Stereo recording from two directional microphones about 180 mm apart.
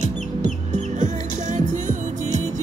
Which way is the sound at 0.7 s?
40° right (ahead or behind).